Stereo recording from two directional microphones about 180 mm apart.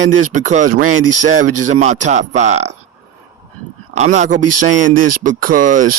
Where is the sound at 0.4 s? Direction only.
45° right (ahead or behind).